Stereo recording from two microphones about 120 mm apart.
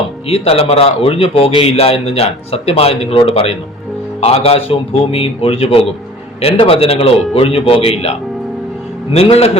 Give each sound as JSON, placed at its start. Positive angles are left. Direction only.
{"t": 0.3, "sound": "a man's voice", "side_deg": 55}
{"t": 9.1, "sound": "a man's voice", "side_deg": 55}